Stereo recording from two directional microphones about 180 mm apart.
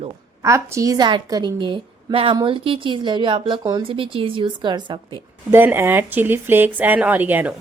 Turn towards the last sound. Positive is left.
turn(degrees=-10)  # may be behind; listen again after turning